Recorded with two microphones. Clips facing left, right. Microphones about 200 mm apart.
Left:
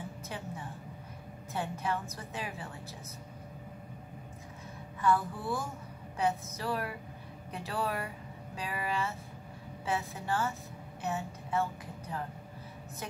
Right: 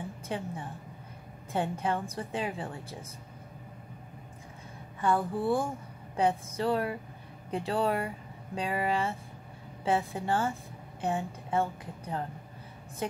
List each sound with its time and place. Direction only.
0.3 s a woman's voice: 25° right (ahead or behind)
1.5 s a woman's voice: 30° right (ahead or behind)
5.0 s a woman's voice: 30° right (ahead or behind)